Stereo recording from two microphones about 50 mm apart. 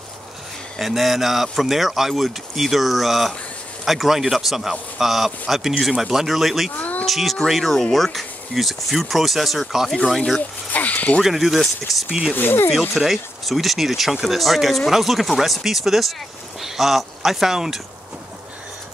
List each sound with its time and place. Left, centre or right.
0.7 s speech: centre
6.8 s a sound: left
7.1 s speech: centre
10.7 s a sound: left
11.2 s speech: centre
12.4 s speech: left
12.9 s speech: centre